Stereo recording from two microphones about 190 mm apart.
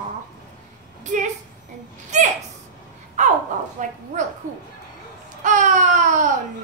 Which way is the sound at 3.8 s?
40° right (ahead or behind).